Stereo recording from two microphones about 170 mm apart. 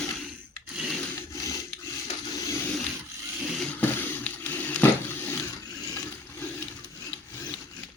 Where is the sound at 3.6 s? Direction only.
10° left (ahead or behind).